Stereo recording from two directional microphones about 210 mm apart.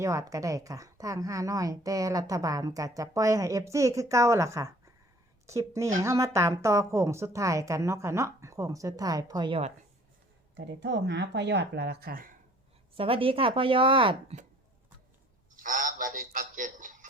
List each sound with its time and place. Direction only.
0.0 s a woman's voice: 15° right (ahead or behind)
10.5 s speech: 55° right (ahead or behind)
13.0 s speech: 25° right (ahead or behind)
15.5 s a sound: 40° right (ahead or behind)